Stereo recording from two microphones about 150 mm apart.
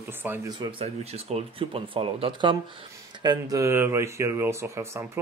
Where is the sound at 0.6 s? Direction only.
40° right (ahead or behind).